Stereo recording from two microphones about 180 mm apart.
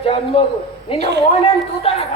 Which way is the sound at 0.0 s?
30° left (ahead or behind).